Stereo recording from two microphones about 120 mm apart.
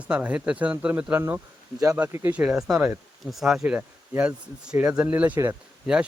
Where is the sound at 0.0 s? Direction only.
10° right (ahead or behind).